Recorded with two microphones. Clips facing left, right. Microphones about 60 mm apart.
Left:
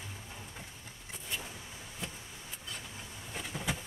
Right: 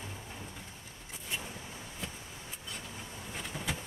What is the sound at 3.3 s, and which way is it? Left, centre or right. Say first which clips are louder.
Bee: left 1 dB; centre.